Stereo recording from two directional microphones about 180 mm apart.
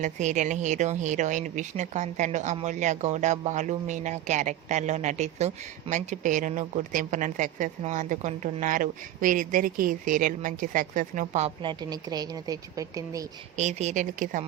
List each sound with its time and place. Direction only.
0.0 s speech: 40° right (ahead or behind)
11.6 s speech: 25° right (ahead or behind)
13.6 s speech: 40° right (ahead or behind)